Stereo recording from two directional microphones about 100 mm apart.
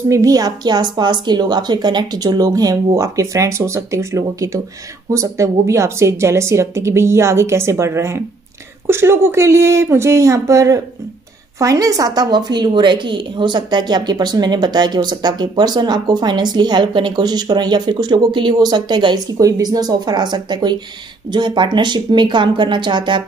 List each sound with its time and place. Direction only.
0.1 s a woman's voice: 35° right (ahead or behind)
19.3 s a woman's voice: 35° right (ahead or behind); by 23.2 s 50° right (ahead or behind)